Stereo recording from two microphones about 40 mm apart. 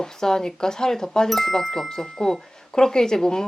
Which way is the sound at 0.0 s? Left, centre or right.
Centre.